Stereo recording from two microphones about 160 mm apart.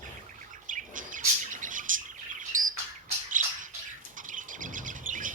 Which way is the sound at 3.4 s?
55° right (ahead or behind).